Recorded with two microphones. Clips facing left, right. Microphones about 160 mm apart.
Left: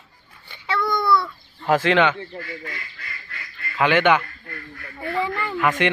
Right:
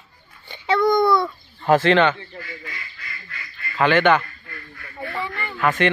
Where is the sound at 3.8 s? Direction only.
10° left (ahead or behind).